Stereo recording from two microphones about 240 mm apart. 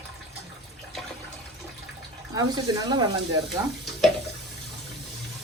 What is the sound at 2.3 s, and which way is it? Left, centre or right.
Speech, centre.